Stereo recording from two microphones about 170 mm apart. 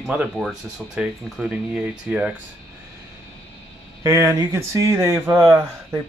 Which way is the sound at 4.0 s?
20° right (ahead or behind).